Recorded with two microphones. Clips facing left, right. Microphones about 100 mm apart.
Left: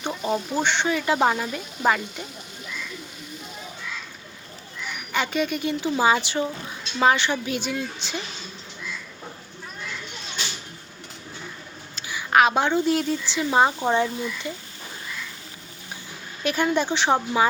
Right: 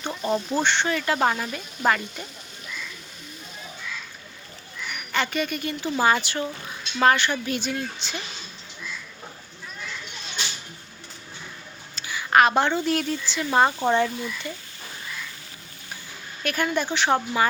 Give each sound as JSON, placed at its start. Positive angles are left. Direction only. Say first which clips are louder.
{"t": 0.0, "sound": "speech", "louder": "even", "side_deg": 10}
{"t": 5.1, "sound": "speech", "louder": "left 1 dB", "side_deg": 15}
{"t": 11.9, "sound": "a sound", "louder": "even", "side_deg": 5}
{"t": 12.8, "sound": "speech", "louder": "left 2 dB", "side_deg": 20}
{"t": 16.4, "sound": "speech", "louder": "left 3 dB", "side_deg": 20}